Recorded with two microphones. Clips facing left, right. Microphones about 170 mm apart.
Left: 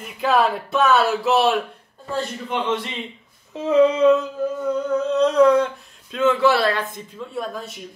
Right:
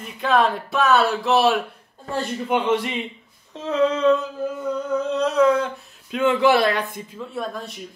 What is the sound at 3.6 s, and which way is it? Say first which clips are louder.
Female singing: left 4 dB; 10° left (ahead or behind).